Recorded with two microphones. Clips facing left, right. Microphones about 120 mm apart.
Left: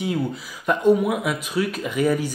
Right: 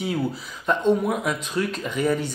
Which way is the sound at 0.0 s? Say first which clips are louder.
Left 1 dB; centre (ahead or behind).